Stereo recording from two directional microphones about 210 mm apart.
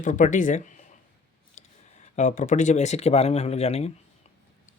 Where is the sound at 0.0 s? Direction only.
35° left (ahead or behind).